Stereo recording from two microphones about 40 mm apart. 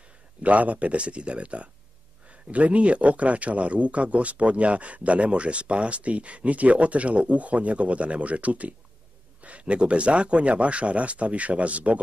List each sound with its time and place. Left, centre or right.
0.4 s speech: right